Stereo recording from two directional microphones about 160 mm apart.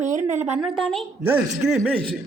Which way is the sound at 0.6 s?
5° right (ahead or behind).